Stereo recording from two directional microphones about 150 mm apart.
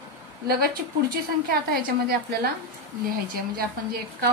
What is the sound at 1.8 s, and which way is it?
Speech, 80° right.